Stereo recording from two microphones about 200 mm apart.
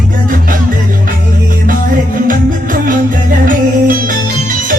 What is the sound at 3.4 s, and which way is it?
Music, 45° right (ahead or behind).